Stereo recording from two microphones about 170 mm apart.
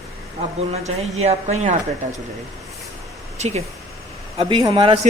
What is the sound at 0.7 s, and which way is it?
Speech, 40° right (ahead or behind).